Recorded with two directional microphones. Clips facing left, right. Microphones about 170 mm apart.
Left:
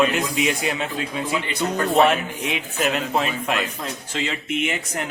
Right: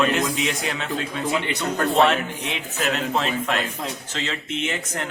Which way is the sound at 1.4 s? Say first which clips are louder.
Left 1 dB; 65° right (ahead or behind).